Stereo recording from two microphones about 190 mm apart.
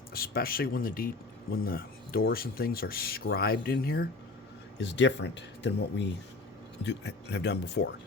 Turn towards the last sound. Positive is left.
turn(degrees=65)  # may be behind; listen again after turning